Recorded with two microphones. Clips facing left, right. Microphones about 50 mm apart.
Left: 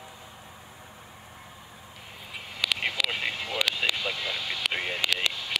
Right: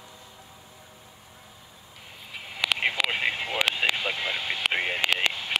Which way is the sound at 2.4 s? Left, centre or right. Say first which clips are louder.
Right 3 dB; centre.